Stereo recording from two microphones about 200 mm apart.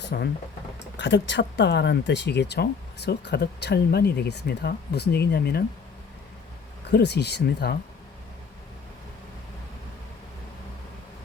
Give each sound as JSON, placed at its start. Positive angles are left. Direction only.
{"t": 0.0, "sound": "speech", "side_deg": 55}
{"t": 6.9, "sound": "speech", "side_deg": 55}